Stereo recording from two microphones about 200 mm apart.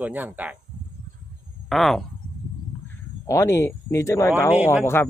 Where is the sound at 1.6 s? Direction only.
Centre (ahead or behind).